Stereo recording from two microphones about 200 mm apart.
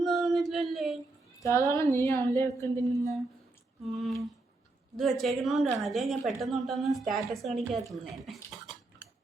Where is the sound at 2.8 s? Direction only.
15° right (ahead or behind).